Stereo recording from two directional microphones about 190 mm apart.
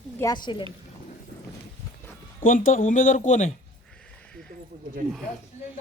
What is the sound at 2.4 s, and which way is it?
Speech, 45° left (ahead or behind).